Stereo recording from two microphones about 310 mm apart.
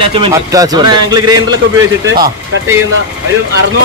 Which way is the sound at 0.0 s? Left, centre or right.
Centre.